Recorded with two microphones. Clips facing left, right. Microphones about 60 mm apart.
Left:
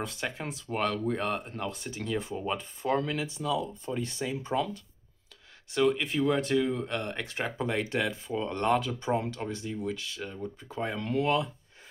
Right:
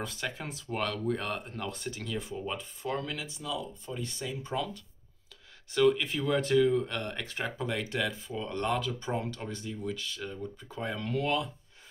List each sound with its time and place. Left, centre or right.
0.0 s speech: centre
2.1 s speech: left
5.8 s speech: left
9.0 s speech: centre
9.3 s speech: left